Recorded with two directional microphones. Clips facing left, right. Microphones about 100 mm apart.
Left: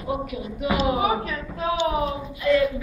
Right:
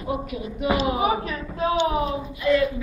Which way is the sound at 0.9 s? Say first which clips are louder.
Even; 20° right (ahead or behind).